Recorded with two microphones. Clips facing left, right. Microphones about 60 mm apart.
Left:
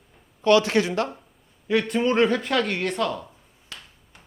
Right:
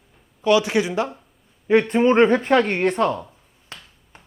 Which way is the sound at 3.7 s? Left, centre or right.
Right.